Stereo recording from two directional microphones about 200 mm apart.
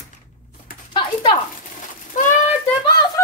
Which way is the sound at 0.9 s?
25° left (ahead or behind).